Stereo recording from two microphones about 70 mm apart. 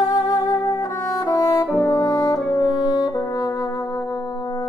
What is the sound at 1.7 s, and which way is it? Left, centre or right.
Brass instrument, left.